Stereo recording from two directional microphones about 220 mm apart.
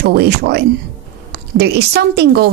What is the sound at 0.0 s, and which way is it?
Speech, 50° right (ahead or behind).